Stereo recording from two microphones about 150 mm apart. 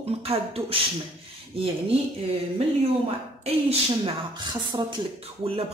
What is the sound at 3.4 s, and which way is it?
Speech, 40° right (ahead or behind).